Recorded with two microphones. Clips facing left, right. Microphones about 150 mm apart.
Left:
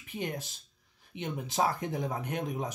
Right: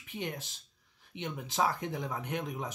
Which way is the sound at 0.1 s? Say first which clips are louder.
Left 2 dB; 45° left (ahead or behind).